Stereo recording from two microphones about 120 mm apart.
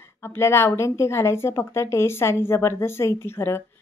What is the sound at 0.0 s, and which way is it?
Speech, 20° left (ahead or behind).